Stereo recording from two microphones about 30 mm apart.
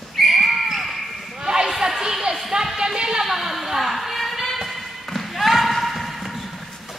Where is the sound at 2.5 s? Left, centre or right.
Right.